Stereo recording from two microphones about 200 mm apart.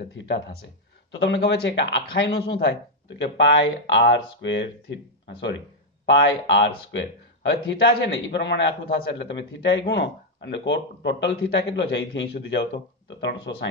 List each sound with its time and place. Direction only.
0.0 s speech: 65° left (ahead or behind)
6.0 s speech: 65° left (ahead or behind)